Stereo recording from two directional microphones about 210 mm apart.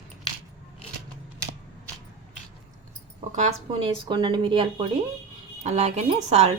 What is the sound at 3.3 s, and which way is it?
Speech, 30° right (ahead or behind).